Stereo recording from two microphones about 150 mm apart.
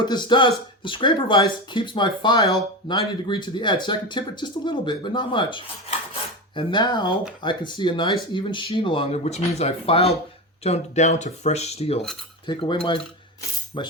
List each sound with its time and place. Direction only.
0.0 s speech: 30° left (ahead or behind)
12.5 s speech: 35° left (ahead or behind)